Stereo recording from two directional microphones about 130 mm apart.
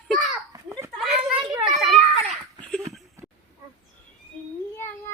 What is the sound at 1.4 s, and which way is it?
Children playing, centre (ahead or behind).